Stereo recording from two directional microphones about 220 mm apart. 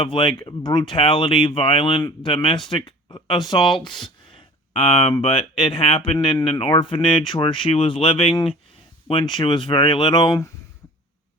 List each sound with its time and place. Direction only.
0.0 s speech: 20° left (ahead or behind)